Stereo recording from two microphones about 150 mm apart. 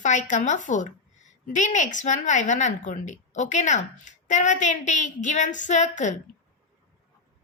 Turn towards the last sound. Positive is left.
turn(degrees=55)  # may be behind; listen again after turning